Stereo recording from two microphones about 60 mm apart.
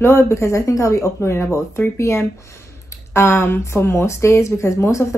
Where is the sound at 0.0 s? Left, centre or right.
Left.